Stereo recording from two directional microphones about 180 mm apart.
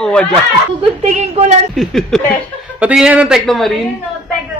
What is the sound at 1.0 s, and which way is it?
Speech, 35° right (ahead or behind).